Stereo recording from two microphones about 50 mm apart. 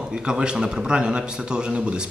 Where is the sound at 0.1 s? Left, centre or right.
Centre.